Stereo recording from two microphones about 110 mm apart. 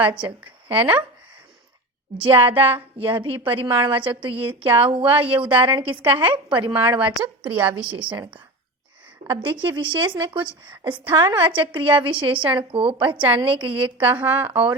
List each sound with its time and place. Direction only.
0.7 s speech: 15° right (ahead or behind)
2.1 s a woman's voice: 50° right (ahead or behind)
7.0 s speech: 10° right (ahead or behind)
7.5 s a woman's voice: 50° right (ahead or behind)
9.2 s a woman's voice: 50° right (ahead or behind)
14.0 s speech: 15° right (ahead or behind)
14.5 s a woman's voice: 55° right (ahead or behind)